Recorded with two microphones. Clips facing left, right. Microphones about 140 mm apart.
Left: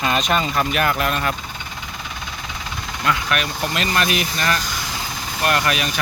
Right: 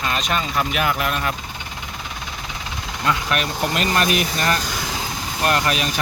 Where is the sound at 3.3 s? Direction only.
35° right (ahead or behind).